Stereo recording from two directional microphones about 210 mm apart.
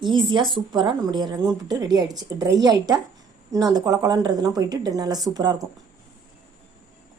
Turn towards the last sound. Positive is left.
turn(degrees=-20)  # may be behind; listen again after turning